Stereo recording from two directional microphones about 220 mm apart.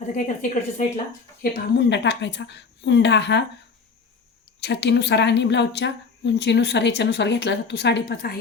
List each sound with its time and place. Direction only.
0.0 s a woman's voice: 35° left (ahead or behind)
1.4 s speech: 50° left (ahead or behind)
4.6 s speech: 50° left (ahead or behind)